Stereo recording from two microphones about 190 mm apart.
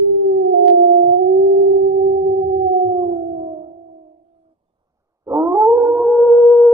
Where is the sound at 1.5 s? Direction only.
60° right (ahead or behind).